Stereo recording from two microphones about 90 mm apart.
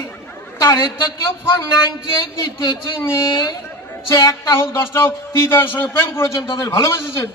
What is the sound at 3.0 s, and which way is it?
Speech, 30° left (ahead or behind).